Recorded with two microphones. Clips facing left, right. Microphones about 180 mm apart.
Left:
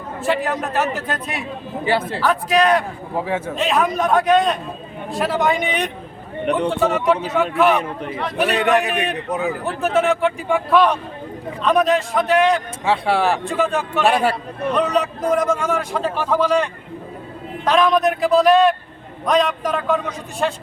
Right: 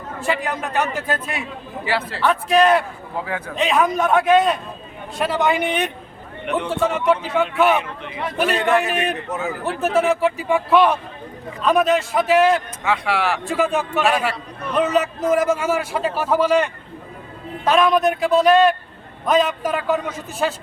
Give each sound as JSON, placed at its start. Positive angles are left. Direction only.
{"t": 0.2, "sound": "a man's voice", "side_deg": 0}
{"t": 3.2, "sound": "a man's voice", "side_deg": 25}
{"t": 3.5, "sound": "a man's voice", "side_deg": 0}
{"t": 6.4, "sound": "speech", "side_deg": 35}
{"t": 6.7, "sound": "a man's voice", "side_deg": 0}
{"t": 8.5, "sound": "a man's voice", "side_deg": 15}
{"t": 8.9, "sound": "a man's voice", "side_deg": 0}
{"t": 9.3, "sound": "a man's voice", "side_deg": 15}
{"t": 9.6, "sound": "a man's voice", "side_deg": 0}
{"t": 12.8, "sound": "speech", "side_deg": 30}
{"t": 13.4, "sound": "a man's voice", "side_deg": 0}
{"t": 14.0, "sound": "speech", "side_deg": 35}
{"t": 14.8, "sound": "a man's voice", "side_deg": -5}
{"t": 17.7, "sound": "a man's voice", "side_deg": 0}